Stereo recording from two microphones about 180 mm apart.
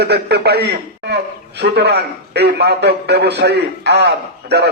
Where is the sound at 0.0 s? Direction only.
65° right (ahead or behind).